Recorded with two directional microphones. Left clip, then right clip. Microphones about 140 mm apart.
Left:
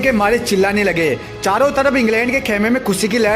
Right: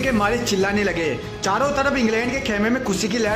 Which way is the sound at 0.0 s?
35° left (ahead or behind).